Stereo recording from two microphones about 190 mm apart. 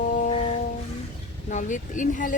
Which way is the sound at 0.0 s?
40° left (ahead or behind).